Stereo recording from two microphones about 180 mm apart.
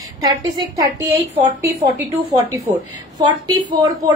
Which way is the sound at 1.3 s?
40° right (ahead or behind).